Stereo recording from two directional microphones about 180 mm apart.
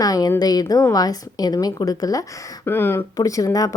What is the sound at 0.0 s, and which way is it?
A woman's voice, 20° left (ahead or behind).